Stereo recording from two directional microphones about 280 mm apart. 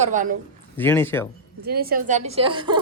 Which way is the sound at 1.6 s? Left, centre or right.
Right.